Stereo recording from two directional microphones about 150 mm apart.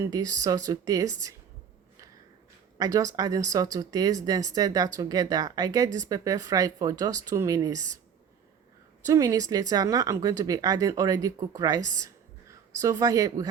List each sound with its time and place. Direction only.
0.1 s speech: 20° right (ahead or behind)
2.7 s speech: 25° right (ahead or behind)
9.0 s speech: 20° right (ahead or behind)